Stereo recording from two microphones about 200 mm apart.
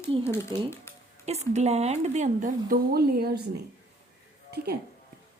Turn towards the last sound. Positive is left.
turn(degrees=-55)  # may be behind; listen again after turning